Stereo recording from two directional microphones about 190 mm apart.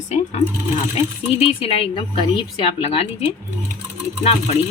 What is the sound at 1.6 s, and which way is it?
A woman's voice, 30° left (ahead or behind).